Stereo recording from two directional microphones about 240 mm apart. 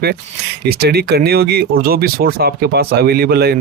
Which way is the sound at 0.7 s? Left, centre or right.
Right.